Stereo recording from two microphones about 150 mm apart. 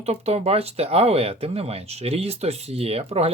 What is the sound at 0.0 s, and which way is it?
Speech, 45° right (ahead or behind).